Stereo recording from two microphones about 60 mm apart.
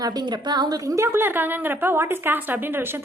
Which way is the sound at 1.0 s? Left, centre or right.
Right.